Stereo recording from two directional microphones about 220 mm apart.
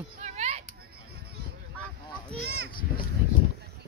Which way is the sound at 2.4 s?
45° right (ahead or behind).